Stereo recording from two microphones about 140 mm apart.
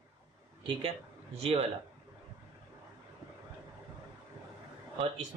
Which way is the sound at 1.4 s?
45° right (ahead or behind).